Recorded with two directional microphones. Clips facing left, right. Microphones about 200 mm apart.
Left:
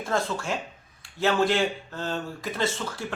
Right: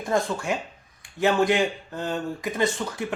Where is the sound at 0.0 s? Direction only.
15° right (ahead or behind).